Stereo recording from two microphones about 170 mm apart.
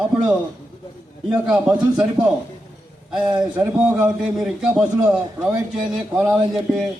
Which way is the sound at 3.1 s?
Centre (ahead or behind).